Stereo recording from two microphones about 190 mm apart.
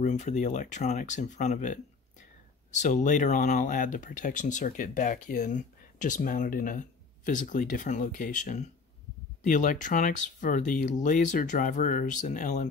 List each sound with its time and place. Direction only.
0.0 s speech: 40° left (ahead or behind)